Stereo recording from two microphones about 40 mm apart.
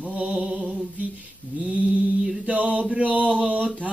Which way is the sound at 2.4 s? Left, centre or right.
Right.